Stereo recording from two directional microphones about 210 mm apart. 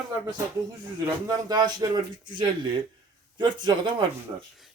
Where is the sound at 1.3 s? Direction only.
20° right (ahead or behind).